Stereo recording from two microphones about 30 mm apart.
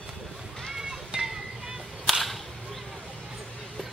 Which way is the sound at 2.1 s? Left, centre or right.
Centre.